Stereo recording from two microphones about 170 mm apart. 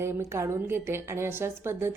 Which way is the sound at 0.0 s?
15° right (ahead or behind).